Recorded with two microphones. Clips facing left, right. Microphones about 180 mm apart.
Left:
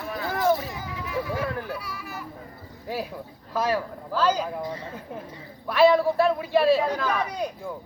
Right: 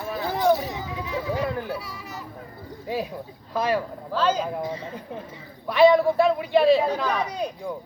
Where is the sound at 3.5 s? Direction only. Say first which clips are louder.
Right 1 dB; 15° right (ahead or behind).